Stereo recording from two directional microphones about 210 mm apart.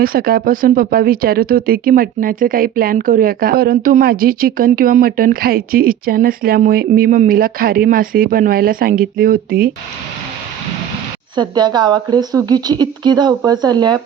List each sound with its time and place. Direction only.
0.0 s speech: 45° right (ahead or behind)
11.3 s speech: 20° right (ahead or behind)